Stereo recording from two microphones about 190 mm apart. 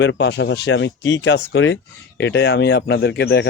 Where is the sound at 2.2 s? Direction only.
65° left (ahead or behind).